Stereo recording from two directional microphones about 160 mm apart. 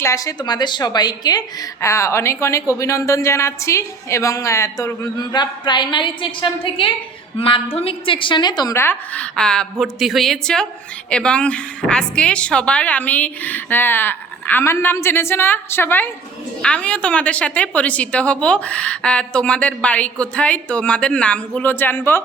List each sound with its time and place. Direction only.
0.0 s a woman's voice: 20° left (ahead or behind)